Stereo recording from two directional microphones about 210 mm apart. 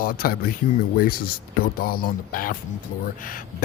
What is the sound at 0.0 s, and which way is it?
Speech, 45° left (ahead or behind).